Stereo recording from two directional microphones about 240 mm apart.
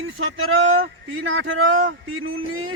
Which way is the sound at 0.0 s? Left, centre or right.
Right.